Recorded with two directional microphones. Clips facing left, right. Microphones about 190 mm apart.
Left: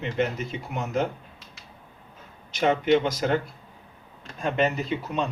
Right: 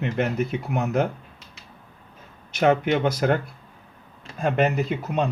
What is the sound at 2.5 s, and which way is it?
Speech, 55° right (ahead or behind).